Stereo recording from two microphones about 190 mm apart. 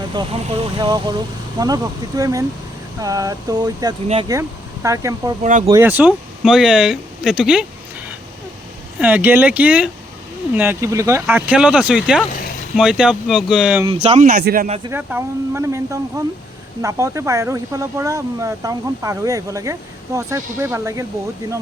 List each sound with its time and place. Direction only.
0.2 s a sound: 25° right (ahead or behind)
4.3 s speech: 15° right (ahead or behind)
5.4 s speech: 40° right (ahead or behind)
5.8 s speech: 10° right (ahead or behind)
9.0 s speech: 10° right (ahead or behind)
13.8 s speech: 30° right (ahead or behind)
14.3 s a man's voice: 50° right (ahead or behind)
14.8 s speech: 10° right (ahead or behind)